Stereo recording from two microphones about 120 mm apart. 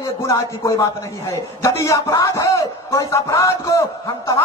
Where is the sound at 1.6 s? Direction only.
25° left (ahead or behind).